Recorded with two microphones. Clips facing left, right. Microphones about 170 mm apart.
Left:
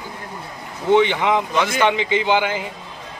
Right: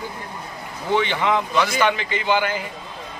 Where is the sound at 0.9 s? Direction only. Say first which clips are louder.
Left 4 dB; 15° left (ahead or behind).